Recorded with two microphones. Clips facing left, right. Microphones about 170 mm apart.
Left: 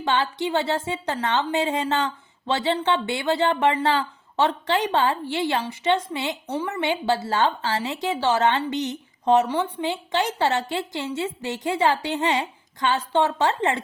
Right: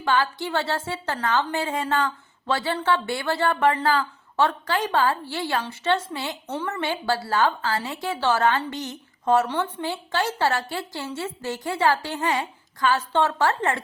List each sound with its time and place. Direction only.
0.0 s a woman's voice: 20° left (ahead or behind)